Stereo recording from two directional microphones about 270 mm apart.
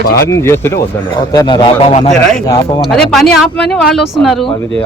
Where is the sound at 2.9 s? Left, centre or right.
Centre.